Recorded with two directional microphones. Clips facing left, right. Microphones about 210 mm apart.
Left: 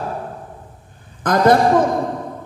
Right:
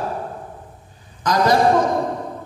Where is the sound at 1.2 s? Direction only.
55° left (ahead or behind).